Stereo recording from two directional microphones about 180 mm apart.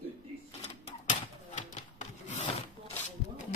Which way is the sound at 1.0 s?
45° left (ahead or behind).